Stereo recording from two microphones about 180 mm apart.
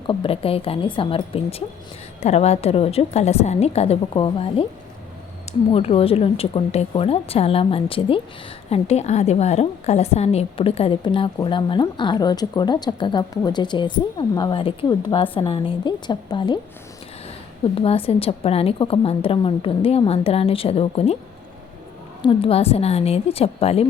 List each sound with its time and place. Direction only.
0.1 s a woman's voice: 30° left (ahead or behind)
17.7 s a woman's voice: 30° left (ahead or behind)
22.2 s a woman's voice: 30° left (ahead or behind)